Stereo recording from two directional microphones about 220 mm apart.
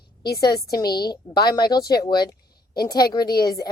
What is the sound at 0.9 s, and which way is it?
A woman's voice, 20° left (ahead or behind).